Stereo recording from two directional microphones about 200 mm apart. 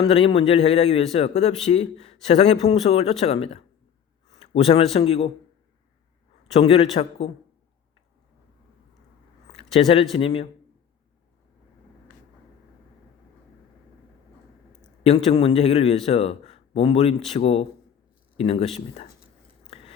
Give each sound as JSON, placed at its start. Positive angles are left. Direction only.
{"t": 0.0, "sound": "a man's voice", "side_deg": 30}
{"t": 6.5, "sound": "a man's voice", "side_deg": 30}
{"t": 9.5, "sound": "a sound", "side_deg": 30}
{"t": 10.2, "sound": "a man's voice", "side_deg": 25}
{"t": 15.0, "sound": "a man's voice", "side_deg": 30}